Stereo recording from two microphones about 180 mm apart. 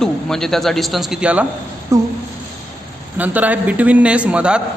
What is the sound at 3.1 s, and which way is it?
A man's voice, 10° right (ahead or behind).